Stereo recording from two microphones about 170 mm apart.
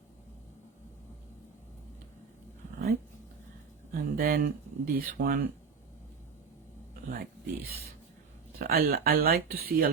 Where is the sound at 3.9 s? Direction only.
60° right (ahead or behind).